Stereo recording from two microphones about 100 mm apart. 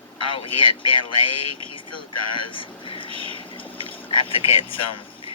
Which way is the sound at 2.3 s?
60° left (ahead or behind).